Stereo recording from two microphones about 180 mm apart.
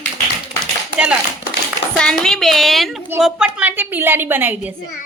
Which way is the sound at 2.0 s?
5° left (ahead or behind).